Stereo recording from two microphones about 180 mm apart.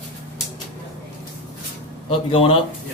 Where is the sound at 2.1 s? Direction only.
30° left (ahead or behind).